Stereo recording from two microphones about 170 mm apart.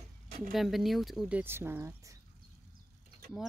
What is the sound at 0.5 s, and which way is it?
Speech, centre (ahead or behind).